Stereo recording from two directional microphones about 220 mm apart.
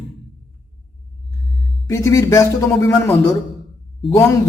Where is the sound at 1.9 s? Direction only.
15° left (ahead or behind).